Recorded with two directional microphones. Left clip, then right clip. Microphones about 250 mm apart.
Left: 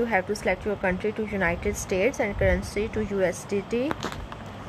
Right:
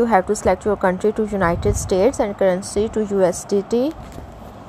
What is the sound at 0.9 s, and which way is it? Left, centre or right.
A woman's voice, centre.